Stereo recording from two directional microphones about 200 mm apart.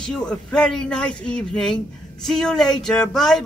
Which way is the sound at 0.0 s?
5° left (ahead or behind).